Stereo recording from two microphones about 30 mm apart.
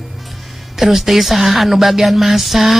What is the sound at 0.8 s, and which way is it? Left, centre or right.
Speech, centre.